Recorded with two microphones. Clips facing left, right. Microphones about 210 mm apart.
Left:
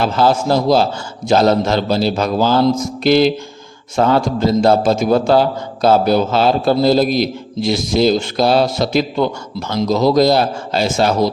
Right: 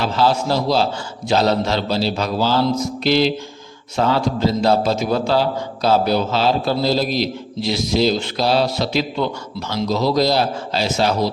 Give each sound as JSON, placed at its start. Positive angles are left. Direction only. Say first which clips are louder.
{"t": 0.0, "sound": "a man's voice", "louder": "left 3 dB", "side_deg": 50}